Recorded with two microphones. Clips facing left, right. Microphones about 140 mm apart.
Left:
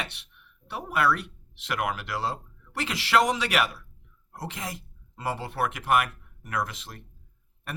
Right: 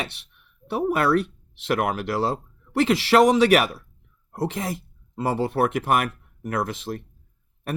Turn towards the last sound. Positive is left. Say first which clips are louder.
# right 5 dB
turn(degrees=-30)  # may be behind; listen again after turning